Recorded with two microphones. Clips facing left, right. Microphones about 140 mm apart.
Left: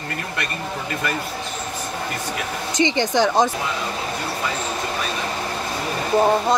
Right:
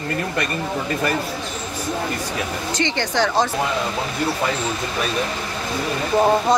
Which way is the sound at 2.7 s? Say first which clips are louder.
Left 3 dB; 15° left (ahead or behind).